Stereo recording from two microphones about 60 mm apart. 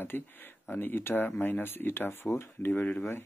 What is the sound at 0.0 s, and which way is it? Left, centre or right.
Speech, left.